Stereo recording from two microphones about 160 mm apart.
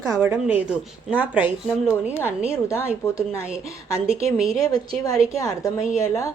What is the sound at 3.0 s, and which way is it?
Speech, 15° left (ahead or behind).